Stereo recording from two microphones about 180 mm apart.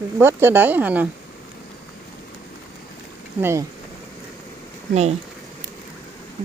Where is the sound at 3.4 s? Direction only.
15° right (ahead or behind).